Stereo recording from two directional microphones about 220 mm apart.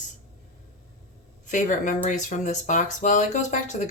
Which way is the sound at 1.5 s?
35° left (ahead or behind).